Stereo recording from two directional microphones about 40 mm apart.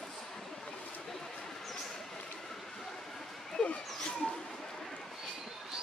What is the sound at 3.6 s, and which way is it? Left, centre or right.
Dog, left.